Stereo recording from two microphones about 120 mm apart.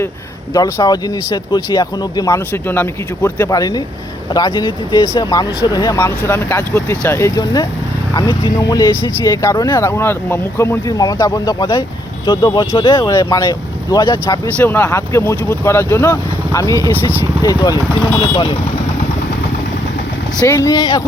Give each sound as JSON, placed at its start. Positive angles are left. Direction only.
{"t": 0.5, "sound": "speech", "side_deg": 30}
{"t": 2.5, "sound": "speech", "side_deg": 15}
{"t": 6.0, "sound": "speech", "side_deg": 20}
{"t": 13.0, "sound": "speech", "side_deg": 25}
{"t": 14.6, "sound": "speech", "side_deg": 15}
{"t": 18.2, "sound": "speech", "side_deg": 40}
{"t": 20.5, "sound": "speech", "side_deg": 25}